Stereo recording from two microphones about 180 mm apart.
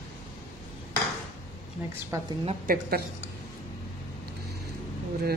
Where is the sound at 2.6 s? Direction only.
50° right (ahead or behind).